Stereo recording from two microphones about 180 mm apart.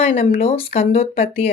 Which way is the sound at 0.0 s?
35° left (ahead or behind).